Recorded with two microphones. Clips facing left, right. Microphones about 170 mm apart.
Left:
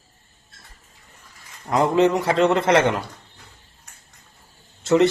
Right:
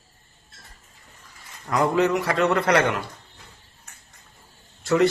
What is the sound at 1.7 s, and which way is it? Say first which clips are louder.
Speech: left 3 dB; 25° left (ahead or behind).